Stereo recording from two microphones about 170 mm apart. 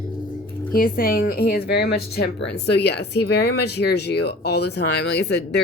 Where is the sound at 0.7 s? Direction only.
55° left (ahead or behind).